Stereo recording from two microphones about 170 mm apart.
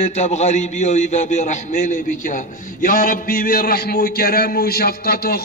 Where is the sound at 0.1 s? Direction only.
40° left (ahead or behind).